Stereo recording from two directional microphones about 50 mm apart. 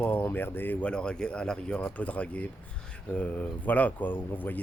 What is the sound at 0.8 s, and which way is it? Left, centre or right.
Speech, centre.